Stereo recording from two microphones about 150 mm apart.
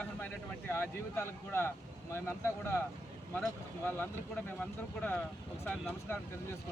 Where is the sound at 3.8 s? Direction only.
10° left (ahead or behind).